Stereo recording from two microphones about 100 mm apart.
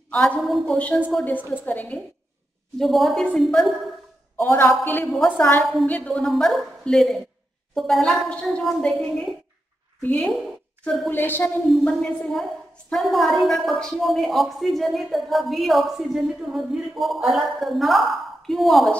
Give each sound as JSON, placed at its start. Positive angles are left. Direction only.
{"t": 0.1, "sound": "a woman's voice", "side_deg": 5}
{"t": 0.7, "sound": "a woman's voice", "side_deg": 15}
{"t": 2.8, "sound": "a woman's voice", "side_deg": 0}
{"t": 4.4, "sound": "a woman's voice", "side_deg": 20}
{"t": 5.6, "sound": "a woman's voice", "side_deg": 0}
{"t": 5.9, "sound": "a woman's voice", "side_deg": 15}
{"t": 11.1, "sound": "a woman's voice", "side_deg": 20}
{"t": 11.8, "sound": "a woman's voice", "side_deg": 5}